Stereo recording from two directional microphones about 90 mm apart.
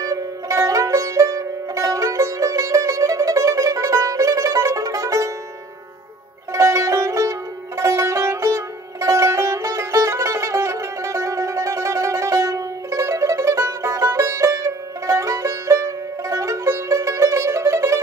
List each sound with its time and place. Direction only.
0.0 s music: 35° right (ahead or behind)
6.5 s music: 35° right (ahead or behind)